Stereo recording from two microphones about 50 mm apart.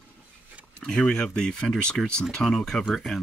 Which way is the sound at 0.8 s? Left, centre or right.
Centre.